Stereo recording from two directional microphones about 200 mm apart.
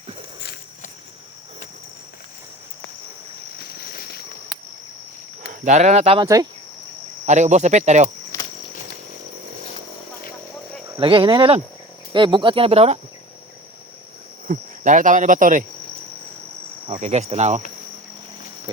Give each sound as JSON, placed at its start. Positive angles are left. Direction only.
{"t": 3.6, "sound": "a sound", "side_deg": 50}
{"t": 5.5, "sound": "speech", "side_deg": -35}
{"t": 6.2, "sound": "speech", "side_deg": -15}
{"t": 7.3, "sound": "speech", "side_deg": -35}
{"t": 11.0, "sound": "speech", "side_deg": -25}
{"t": 14.4, "sound": "cricket", "side_deg": -40}
{"t": 16.8, "sound": "speech", "side_deg": -30}